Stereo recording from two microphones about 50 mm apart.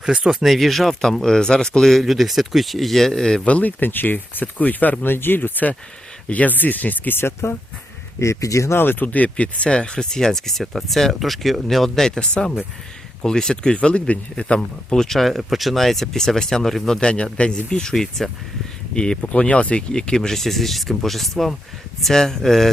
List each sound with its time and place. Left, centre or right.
0.0 s speech: centre
0.4 s speech: centre
3.4 s speech: left
7.2 s speech: left
8.2 s speech: left
8.7 s speech: left
9.1 s speech: left
15.0 s speech: centre